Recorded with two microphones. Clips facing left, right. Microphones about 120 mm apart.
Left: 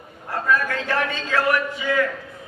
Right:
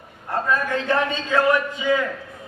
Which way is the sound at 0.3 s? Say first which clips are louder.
Even; 25° right (ahead or behind).